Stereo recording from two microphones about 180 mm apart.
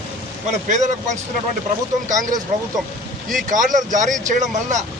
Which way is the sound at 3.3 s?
45° right (ahead or behind).